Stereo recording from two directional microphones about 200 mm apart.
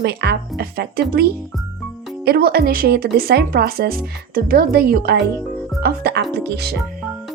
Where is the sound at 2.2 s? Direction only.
50° right (ahead or behind).